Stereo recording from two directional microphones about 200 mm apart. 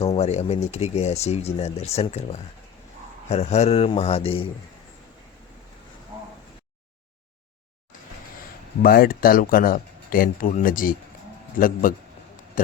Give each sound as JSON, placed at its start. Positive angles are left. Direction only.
{"t": 0.0, "sound": "speech", "side_deg": 30}
{"t": 8.8, "sound": "speech", "side_deg": 45}
{"t": 12.6, "sound": "a sound", "side_deg": 40}